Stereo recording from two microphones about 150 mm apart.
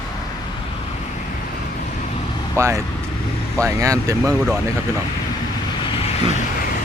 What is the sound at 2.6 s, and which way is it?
Speech, 20° right (ahead or behind).